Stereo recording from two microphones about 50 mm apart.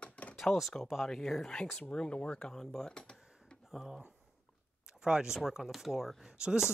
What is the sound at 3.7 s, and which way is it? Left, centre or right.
Speech, centre.